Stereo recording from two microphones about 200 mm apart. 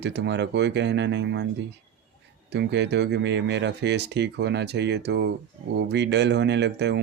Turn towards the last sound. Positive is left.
turn(degrees=-60)  # may be behind; listen again after turning